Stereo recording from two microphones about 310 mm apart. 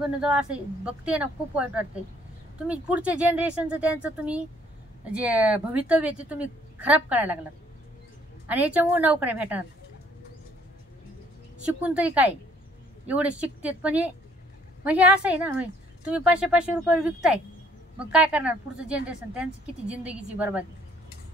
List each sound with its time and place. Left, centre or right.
0.0 s a woman's voice: centre
8.5 s a woman's voice: centre
11.8 s a woman's voice: centre